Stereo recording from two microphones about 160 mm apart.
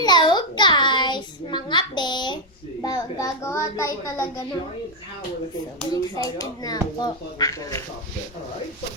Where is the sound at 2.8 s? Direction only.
20° left (ahead or behind).